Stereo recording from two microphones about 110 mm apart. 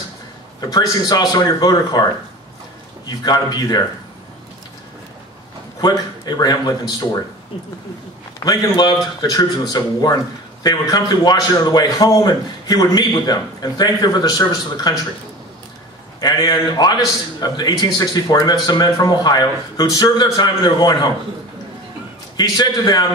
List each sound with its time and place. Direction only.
0.6 s a man's voice: 35° left (ahead or behind)
3.3 s a man's voice: 40° left (ahead or behind)
5.8 s a man's voice: 40° left (ahead or behind)
8.4 s a man's voice: 35° left (ahead or behind)
16.2 s a man's voice: 35° left (ahead or behind)
22.4 s a man's voice: 40° left (ahead or behind)